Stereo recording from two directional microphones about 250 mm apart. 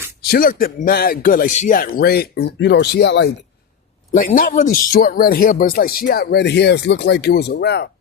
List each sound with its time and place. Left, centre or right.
0.3 s speech: left
4.1 s speech: left